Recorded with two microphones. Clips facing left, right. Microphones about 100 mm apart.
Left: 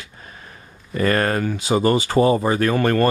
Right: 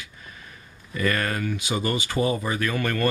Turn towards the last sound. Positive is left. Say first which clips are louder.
# left 8 dB
turn(degrees=40)  # may be behind; listen again after turning